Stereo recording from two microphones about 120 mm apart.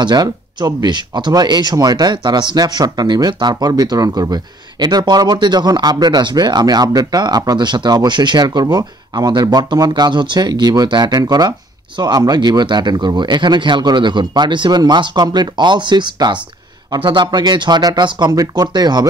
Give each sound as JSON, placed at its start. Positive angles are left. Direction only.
{"t": 0.0, "sound": "speech", "side_deg": -35}